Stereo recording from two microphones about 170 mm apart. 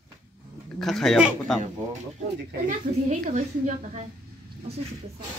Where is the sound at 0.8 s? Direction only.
Centre (ahead or behind).